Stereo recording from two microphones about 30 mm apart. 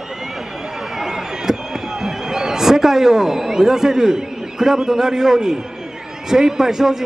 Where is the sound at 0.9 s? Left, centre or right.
Centre.